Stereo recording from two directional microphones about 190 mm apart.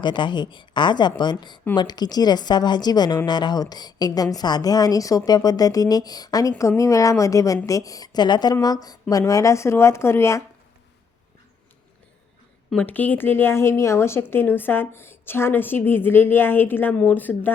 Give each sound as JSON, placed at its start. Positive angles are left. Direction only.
{"t": 0.0, "sound": "a woman's voice", "side_deg": 25}
{"t": 12.7, "sound": "a woman's voice", "side_deg": 10}